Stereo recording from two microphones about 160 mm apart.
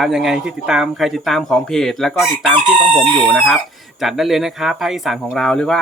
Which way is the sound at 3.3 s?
Centre (ahead or behind).